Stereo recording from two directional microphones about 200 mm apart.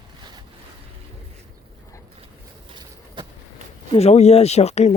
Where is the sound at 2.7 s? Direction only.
20° right (ahead or behind).